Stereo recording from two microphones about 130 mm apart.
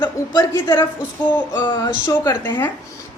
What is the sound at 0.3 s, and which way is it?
Speech, 20° left (ahead or behind).